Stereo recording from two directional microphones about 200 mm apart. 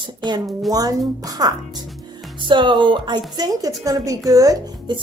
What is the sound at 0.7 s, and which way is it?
Speech, 20° right (ahead or behind).